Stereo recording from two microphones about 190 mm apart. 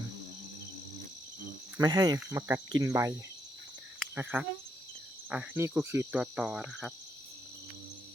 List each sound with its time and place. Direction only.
1.8 s speech: 20° right (ahead or behind)
2.1 s cricket: 15° right (ahead or behind)